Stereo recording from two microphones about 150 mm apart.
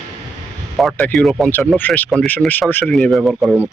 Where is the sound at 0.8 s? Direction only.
Centre (ahead or behind).